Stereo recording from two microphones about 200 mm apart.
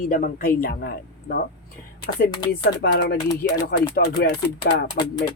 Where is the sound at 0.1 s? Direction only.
45° left (ahead or behind).